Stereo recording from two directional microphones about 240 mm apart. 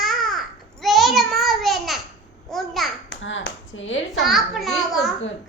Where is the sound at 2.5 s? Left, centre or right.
Centre.